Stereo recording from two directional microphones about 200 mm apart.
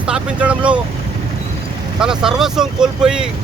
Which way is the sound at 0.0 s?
5° right (ahead or behind).